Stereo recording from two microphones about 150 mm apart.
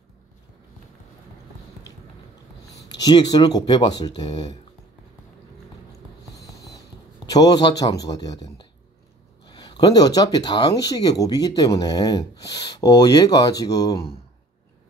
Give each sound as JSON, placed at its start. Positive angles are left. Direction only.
{"t": 2.9, "sound": "speech", "side_deg": 30}
{"t": 7.2, "sound": "speech", "side_deg": 25}